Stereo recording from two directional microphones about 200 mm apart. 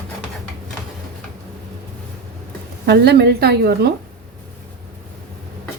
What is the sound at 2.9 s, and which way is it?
A woman's voice, 55° right (ahead or behind).